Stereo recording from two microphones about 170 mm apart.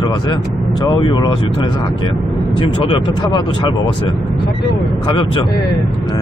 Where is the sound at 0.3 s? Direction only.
25° left (ahead or behind).